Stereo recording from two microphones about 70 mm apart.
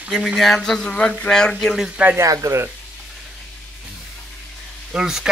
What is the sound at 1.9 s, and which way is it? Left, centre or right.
Speech, centre.